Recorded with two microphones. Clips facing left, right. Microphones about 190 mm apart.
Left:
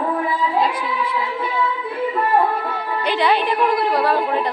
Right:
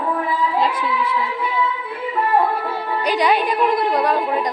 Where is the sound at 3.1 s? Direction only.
15° right (ahead or behind).